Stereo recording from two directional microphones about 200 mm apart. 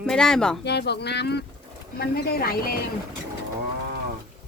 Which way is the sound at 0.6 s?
55° left (ahead or behind).